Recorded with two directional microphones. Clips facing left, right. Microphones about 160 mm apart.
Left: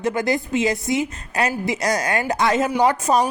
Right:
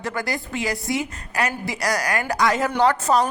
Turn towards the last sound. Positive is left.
turn(degrees=15)  # may be behind; listen again after turning